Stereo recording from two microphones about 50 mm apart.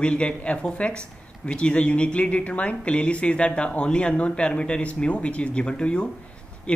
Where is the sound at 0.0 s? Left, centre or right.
Left.